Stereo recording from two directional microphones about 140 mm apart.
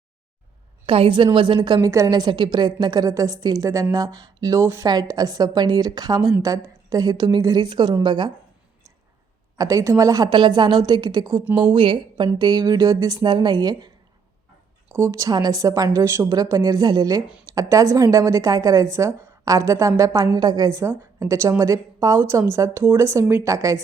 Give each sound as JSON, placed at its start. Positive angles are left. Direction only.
{"t": 0.9, "sound": "a woman's voice", "side_deg": -40}
{"t": 9.6, "sound": "a woman's voice", "side_deg": -25}
{"t": 14.9, "sound": "a woman's voice", "side_deg": -20}